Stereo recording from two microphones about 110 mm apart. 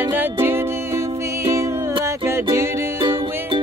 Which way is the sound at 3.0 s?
50° right (ahead or behind).